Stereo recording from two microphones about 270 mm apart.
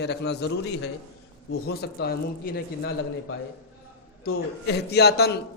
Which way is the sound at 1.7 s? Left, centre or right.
Left.